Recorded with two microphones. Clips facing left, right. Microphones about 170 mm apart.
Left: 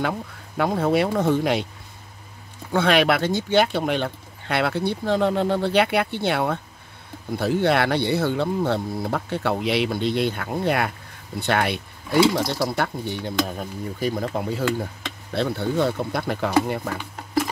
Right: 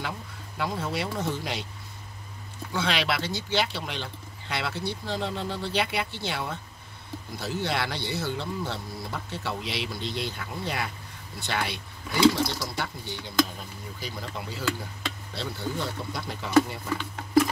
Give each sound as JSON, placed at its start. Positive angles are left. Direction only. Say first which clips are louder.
{"t": 0.0, "sound": "speech", "louder": "left 9 dB", "side_deg": 55}
{"t": 2.7, "sound": "speech", "louder": "left 9 dB", "side_deg": 55}